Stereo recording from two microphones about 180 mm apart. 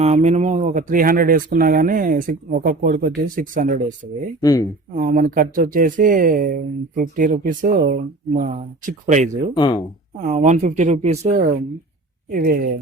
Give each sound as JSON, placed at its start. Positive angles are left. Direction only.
{"t": 0.0, "sound": "speech", "side_deg": -40}
{"t": 4.4, "sound": "speech", "side_deg": 20}
{"t": 4.9, "sound": "speech", "side_deg": -45}
{"t": 9.6, "sound": "speech", "side_deg": 25}
{"t": 10.2, "sound": "speech", "side_deg": -40}
{"t": 12.3, "sound": "speech", "side_deg": -55}